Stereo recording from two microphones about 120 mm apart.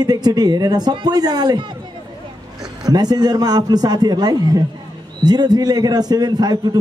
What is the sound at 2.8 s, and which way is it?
A man's voice, 35° right (ahead or behind).